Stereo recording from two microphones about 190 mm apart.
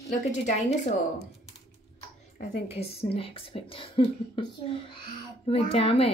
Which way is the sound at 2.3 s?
35° left (ahead or behind).